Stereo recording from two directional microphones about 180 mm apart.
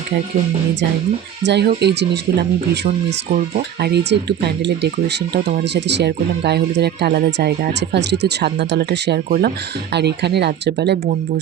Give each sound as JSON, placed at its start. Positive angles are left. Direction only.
{"t": 1.5, "sound": "speech", "side_deg": -70}
{"t": 3.8, "sound": "speech", "side_deg": -65}